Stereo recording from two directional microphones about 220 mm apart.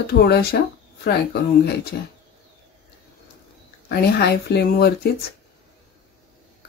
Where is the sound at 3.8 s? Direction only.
45° left (ahead or behind).